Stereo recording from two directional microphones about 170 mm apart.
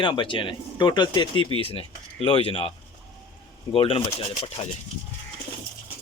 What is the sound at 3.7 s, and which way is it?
Speech, 35° left (ahead or behind).